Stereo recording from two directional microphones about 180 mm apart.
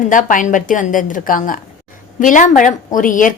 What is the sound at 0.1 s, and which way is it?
A woman's voice, 45° left (ahead or behind).